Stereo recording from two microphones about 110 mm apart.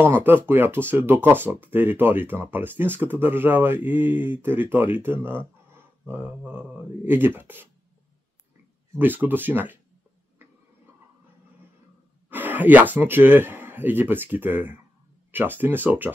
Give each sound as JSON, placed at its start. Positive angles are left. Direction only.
{"t": 0.2, "sound": "speech", "side_deg": -20}
{"t": 8.9, "sound": "speech", "side_deg": -15}
{"t": 12.3, "sound": "speech", "side_deg": -15}